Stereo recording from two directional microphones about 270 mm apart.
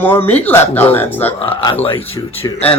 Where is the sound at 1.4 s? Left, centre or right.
Centre.